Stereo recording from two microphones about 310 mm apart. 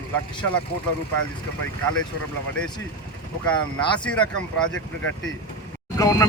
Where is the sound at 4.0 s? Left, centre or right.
Centre.